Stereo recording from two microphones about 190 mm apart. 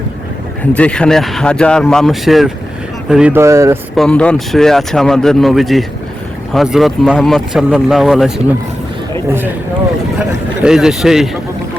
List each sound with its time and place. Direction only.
0.8 s speech: 5° left (ahead or behind); by 3.8 s 15° right (ahead or behind)
3.9 s speech: 5° left (ahead or behind)
10.2 s speech: 5° right (ahead or behind)